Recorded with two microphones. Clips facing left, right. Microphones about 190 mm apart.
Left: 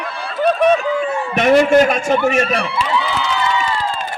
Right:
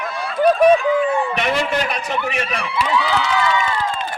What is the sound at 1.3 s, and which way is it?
A man's voice, 45° left (ahead or behind).